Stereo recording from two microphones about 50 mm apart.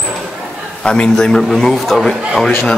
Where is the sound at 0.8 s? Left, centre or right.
Centre.